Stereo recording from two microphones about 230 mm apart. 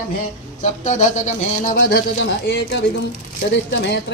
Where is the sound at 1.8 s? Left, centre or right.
Left.